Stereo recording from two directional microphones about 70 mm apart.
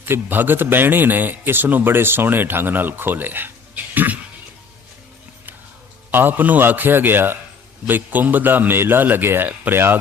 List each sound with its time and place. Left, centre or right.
0.0 s speech: right
3.9 s cough: right
6.1 s speech: right